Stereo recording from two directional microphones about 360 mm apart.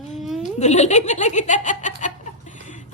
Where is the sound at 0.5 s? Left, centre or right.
Centre.